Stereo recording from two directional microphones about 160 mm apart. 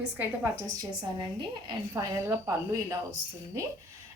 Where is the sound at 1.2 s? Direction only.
30° right (ahead or behind).